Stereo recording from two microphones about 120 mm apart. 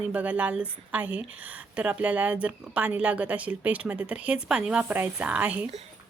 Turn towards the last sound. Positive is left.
turn(degrees=-10)  # may be behind; listen again after turning